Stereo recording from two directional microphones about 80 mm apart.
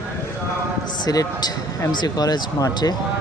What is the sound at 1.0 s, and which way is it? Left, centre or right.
Speech, left.